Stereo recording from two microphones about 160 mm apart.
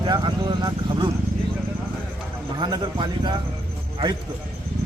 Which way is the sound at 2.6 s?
30° right (ahead or behind).